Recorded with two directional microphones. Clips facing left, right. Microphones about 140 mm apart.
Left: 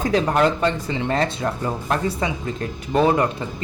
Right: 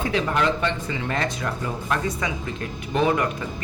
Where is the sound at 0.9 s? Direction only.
25° left (ahead or behind).